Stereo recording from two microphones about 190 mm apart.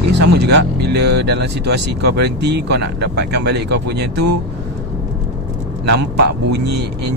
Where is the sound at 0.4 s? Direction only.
60° right (ahead or behind).